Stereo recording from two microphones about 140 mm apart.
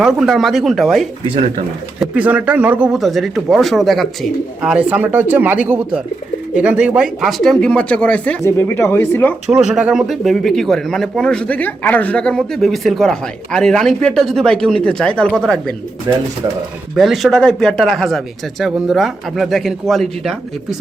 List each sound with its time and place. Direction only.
0.0 s speech: 5° right (ahead or behind); by 9.3 s 15° left (ahead or behind)
9.5 s speech: 5° right (ahead or behind)
16.1 s speech: 30° right (ahead or behind)
16.9 s speech: 5° right (ahead or behind)